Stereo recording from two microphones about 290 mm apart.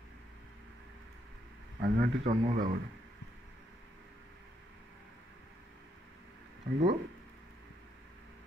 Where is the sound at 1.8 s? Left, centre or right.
Right.